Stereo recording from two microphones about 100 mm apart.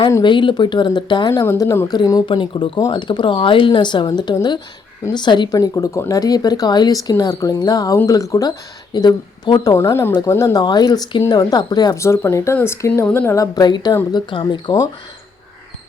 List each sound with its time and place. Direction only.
0.2 s speech: 50° left (ahead or behind)
1.3 s speech: 30° left (ahead or behind)
2.2 s speech: 55° left (ahead or behind)
9.7 s speech: 25° left (ahead or behind); by 11.9 s 40° left (ahead or behind)
11.9 s speech: 25° left (ahead or behind)
13.3 s speech: 35° left (ahead or behind)